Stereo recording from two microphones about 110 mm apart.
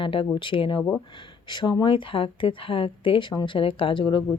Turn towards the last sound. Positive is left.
turn(degrees=50)  # may be behind; listen again after turning